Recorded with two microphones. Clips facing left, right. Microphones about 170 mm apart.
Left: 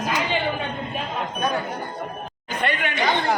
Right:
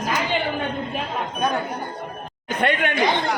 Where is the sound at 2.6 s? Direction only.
55° right (ahead or behind).